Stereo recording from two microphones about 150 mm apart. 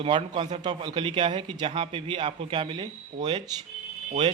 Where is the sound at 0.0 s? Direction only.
35° right (ahead or behind).